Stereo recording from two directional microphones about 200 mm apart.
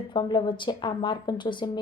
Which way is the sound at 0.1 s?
20° left (ahead or behind).